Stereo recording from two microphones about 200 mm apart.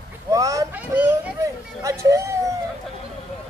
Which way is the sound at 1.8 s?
15° right (ahead or behind).